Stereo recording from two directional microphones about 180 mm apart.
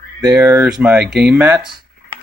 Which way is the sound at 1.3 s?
10° right (ahead or behind).